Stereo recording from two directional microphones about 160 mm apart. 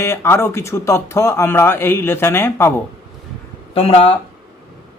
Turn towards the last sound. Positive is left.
turn(degrees=40)  # may be behind; listen again after turning